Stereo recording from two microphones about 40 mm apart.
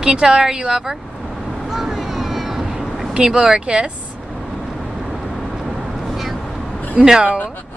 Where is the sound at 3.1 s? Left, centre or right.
Centre.